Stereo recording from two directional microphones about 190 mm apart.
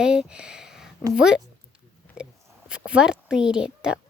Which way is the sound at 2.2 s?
5° right (ahead or behind).